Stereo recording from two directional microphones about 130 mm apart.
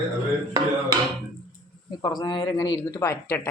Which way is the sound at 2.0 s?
35° left (ahead or behind).